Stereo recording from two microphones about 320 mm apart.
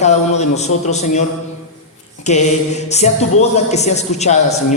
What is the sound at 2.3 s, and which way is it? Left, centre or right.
Speech, left.